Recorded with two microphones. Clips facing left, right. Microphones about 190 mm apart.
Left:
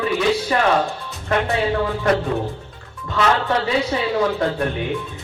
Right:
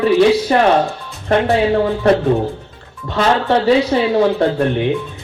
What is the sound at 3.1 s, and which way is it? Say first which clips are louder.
Speech: right 4 dB; 30° right (ahead or behind).